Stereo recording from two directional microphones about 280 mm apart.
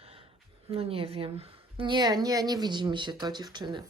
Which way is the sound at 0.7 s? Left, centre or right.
Centre.